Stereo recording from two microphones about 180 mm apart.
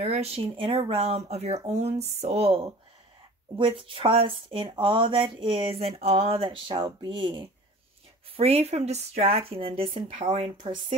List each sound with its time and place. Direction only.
0.0 s speech: 35° right (ahead or behind)